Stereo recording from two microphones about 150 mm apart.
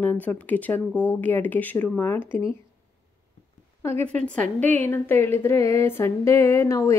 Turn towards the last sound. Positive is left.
turn(degrees=20)  # may be behind; listen again after turning